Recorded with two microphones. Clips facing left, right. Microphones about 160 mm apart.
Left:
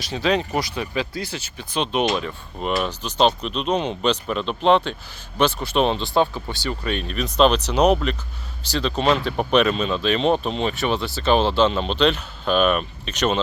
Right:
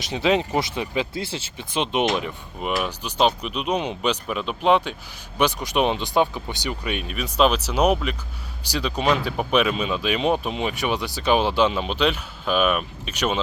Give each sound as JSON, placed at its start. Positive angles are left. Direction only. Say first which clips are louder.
{"t": 0.0, "sound": "speech", "louder": "right 1 dB", "side_deg": -20}
{"t": 2.6, "sound": "speech", "louder": "left 2 dB", "side_deg": -10}